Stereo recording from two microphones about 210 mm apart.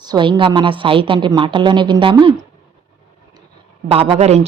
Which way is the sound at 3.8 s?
25° right (ahead or behind).